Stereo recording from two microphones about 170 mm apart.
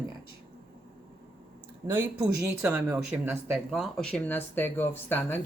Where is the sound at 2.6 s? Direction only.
10° right (ahead or behind).